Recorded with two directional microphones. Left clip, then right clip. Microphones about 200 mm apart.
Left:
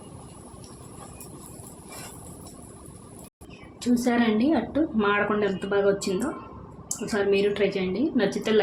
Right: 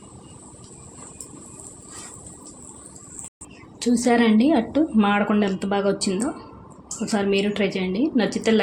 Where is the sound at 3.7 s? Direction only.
40° right (ahead or behind).